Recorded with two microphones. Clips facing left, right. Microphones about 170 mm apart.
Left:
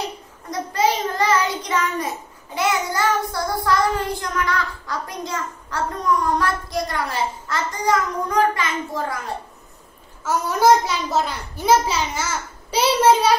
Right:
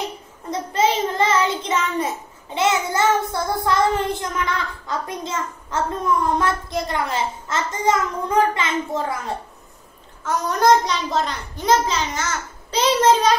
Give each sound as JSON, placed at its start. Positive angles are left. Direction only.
{"t": 0.5, "sound": "child singing", "side_deg": -25}
{"t": 10.2, "sound": "a child's voice", "side_deg": 5}